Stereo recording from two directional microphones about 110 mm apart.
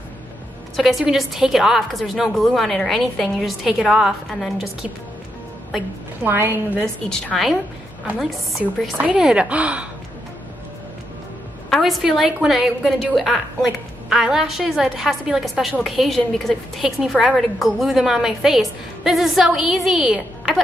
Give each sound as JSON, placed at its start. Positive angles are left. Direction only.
{"t": 0.7, "sound": "a woman's voice", "side_deg": 0}
{"t": 6.2, "sound": "a woman's voice", "side_deg": -20}
{"t": 7.1, "sound": "a woman's voice", "side_deg": 5}
{"t": 9.0, "sound": "speech", "side_deg": -10}
{"t": 11.7, "sound": "a woman's voice", "side_deg": 0}